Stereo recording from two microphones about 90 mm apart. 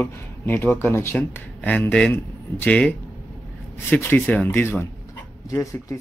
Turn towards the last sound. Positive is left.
turn(degrees=35)  # may be behind; listen again after turning